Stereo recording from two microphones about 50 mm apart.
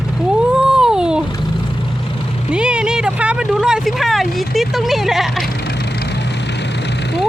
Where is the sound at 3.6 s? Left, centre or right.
Centre.